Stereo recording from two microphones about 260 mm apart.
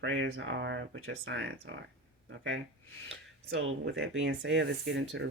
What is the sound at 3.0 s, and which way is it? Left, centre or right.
Speech, right.